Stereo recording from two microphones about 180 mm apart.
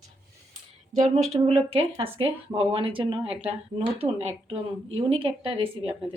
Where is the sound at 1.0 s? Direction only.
35° right (ahead or behind).